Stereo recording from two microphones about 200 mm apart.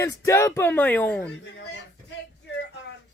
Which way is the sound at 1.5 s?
55° left (ahead or behind).